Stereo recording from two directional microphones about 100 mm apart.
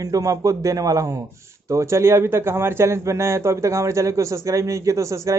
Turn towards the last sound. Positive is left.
turn(degrees=-30)  # may be behind; listen again after turning